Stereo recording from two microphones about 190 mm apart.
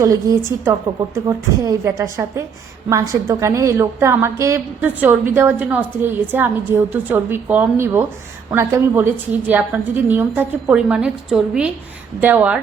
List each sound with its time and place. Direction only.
0.0 s a woman's voice: 15° right (ahead or behind)